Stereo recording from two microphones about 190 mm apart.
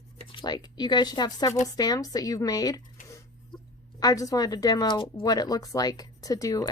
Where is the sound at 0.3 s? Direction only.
25° left (ahead or behind).